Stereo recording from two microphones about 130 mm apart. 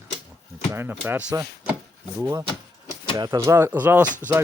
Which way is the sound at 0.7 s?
15° right (ahead or behind).